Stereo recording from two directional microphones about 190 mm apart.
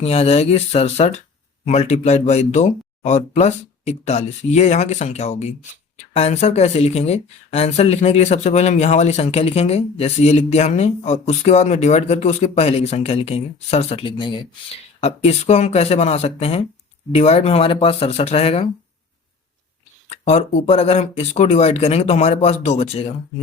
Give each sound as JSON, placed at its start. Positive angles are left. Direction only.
{"t": 0.0, "sound": "speech", "side_deg": 35}
{"t": 20.1, "sound": "speech", "side_deg": 35}